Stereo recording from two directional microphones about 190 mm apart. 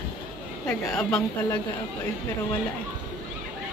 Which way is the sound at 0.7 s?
5° left (ahead or behind).